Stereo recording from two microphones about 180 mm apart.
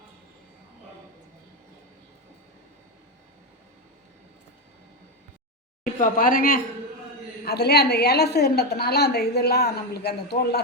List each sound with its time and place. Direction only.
5.8 s speech: 50° left (ahead or behind)
7.4 s a woman's voice: 65° left (ahead or behind)